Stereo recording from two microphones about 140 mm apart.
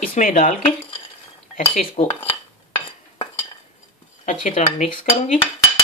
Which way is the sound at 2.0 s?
40° left (ahead or behind).